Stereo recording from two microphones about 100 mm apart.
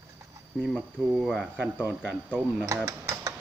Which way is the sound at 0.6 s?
Centre (ahead or behind).